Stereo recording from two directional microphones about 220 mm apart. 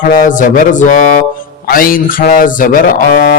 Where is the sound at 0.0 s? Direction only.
35° left (ahead or behind).